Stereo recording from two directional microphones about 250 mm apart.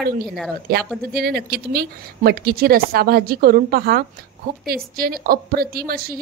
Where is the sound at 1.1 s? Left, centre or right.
Right.